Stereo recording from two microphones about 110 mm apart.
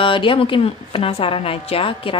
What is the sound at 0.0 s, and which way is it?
A woman's voice, 50° left (ahead or behind).